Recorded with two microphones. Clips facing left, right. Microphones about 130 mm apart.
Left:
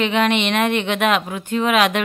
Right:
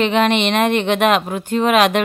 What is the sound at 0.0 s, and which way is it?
Speech, 35° right (ahead or behind).